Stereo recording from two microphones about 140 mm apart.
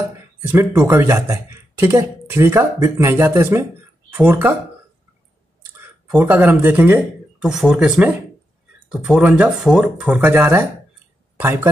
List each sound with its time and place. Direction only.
0.5 s speech: 20° right (ahead or behind)
6.1 s speech: 15° right (ahead or behind)